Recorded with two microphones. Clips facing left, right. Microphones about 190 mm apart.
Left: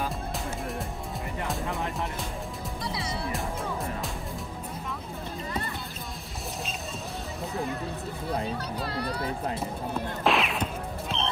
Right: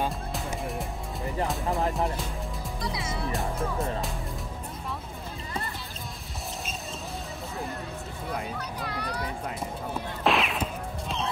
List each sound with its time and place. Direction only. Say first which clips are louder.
0.3 s music: right 1 dB; centre (ahead or behind)
2.8 s music: right 1 dB; 30° left (ahead or behind)
8.3 s speech: left 3 dB; 30° left (ahead or behind)
10.2 s a sound: right 1 dB; centre (ahead or behind)